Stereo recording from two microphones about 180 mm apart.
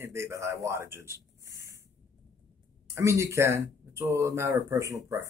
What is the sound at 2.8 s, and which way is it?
Speech, 15° right (ahead or behind).